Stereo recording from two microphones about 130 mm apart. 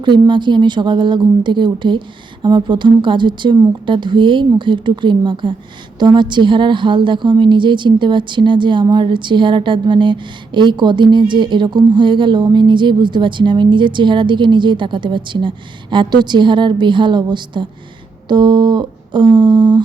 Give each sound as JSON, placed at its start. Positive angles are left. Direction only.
{"t": 0.0, "sound": "a woman's voice", "side_deg": -35}